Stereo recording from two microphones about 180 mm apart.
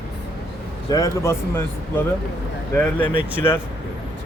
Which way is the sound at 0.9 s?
20° left (ahead or behind).